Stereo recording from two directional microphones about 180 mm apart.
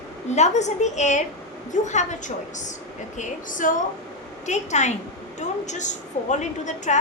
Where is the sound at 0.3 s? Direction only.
40° left (ahead or behind).